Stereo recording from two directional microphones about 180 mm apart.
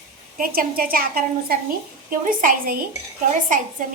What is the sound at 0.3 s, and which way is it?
A woman's voice, 55° right (ahead or behind).